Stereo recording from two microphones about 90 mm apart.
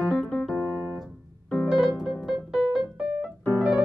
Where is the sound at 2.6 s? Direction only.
10° right (ahead or behind).